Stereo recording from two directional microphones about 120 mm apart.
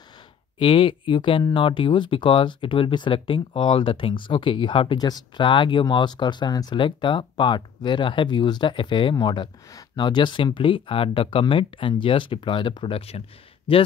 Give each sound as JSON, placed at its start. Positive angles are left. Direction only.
{"t": 0.6, "sound": "speech", "side_deg": 45}